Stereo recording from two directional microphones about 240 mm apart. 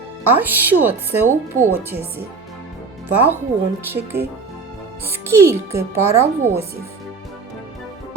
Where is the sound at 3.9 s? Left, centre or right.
Centre.